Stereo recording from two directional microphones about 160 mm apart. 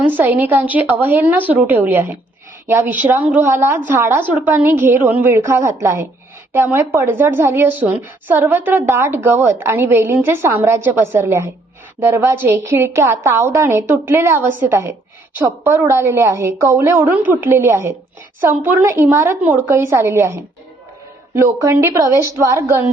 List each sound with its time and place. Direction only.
0.1 s a woman's voice: 10° right (ahead or behind)